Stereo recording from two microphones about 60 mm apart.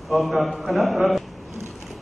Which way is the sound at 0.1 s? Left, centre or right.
Centre.